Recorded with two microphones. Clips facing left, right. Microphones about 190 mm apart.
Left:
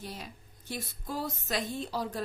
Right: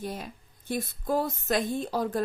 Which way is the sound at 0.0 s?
50° right (ahead or behind).